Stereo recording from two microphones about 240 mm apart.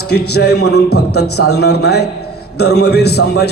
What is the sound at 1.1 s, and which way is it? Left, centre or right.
Speech, left.